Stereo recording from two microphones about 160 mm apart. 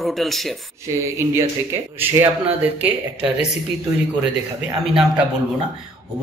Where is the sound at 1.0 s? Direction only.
15° right (ahead or behind).